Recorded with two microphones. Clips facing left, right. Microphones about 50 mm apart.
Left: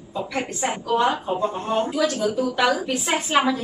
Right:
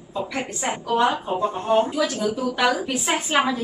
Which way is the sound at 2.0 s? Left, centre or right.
Centre.